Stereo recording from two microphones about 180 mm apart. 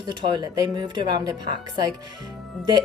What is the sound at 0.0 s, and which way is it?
Speech, 25° right (ahead or behind).